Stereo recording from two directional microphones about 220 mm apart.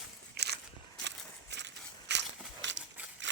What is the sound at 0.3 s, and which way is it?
Walk, 50° right (ahead or behind).